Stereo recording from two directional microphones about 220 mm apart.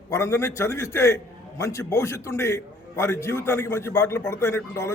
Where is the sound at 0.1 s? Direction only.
10° left (ahead or behind).